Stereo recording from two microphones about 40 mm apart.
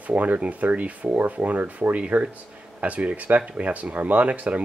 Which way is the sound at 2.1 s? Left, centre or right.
Right.